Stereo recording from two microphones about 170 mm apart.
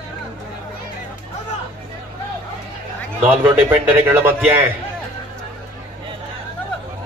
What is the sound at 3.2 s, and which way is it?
A man's voice, 10° right (ahead or behind).